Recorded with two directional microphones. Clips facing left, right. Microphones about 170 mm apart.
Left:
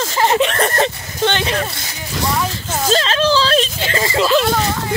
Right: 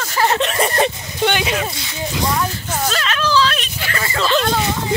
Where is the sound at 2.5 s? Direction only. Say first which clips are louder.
Left 1 dB; 90° left.